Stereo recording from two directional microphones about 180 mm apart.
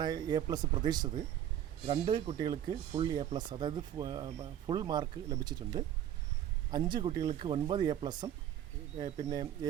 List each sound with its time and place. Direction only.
0.0 s speech: 20° right (ahead or behind)
1.9 s speech: 30° right (ahead or behind)
9.0 s speech: 40° right (ahead or behind)
9.3 s speech: 25° right (ahead or behind)